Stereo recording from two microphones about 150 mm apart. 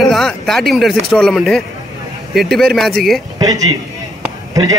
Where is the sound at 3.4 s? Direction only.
25° right (ahead or behind).